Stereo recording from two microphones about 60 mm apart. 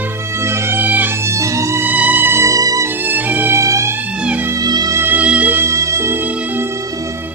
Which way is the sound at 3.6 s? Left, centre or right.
Right.